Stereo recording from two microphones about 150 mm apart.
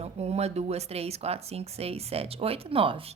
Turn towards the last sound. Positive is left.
turn(degrees=-35)  # may be behind; listen again after turning